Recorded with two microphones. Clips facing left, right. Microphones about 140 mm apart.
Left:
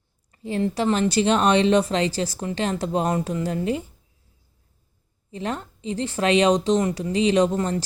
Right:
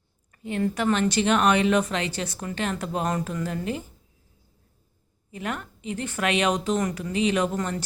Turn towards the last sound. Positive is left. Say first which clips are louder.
# left 5 dB
turn(degrees=30)  # may be behind; listen again after turning